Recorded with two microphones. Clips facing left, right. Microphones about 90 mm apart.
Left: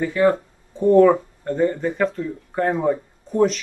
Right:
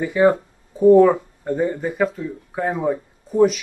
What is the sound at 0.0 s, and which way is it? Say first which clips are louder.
Speech: right 2 dB; 15° right (ahead or behind).